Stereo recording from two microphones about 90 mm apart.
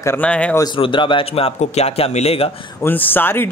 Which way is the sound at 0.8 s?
70° left (ahead or behind).